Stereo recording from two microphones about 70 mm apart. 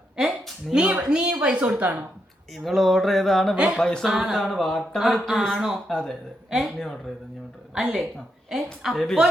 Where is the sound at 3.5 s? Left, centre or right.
Centre.